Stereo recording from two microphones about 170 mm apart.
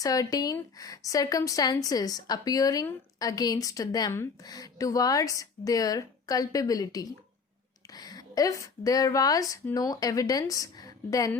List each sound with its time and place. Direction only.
0.0 s a woman's voice: 20° left (ahead or behind)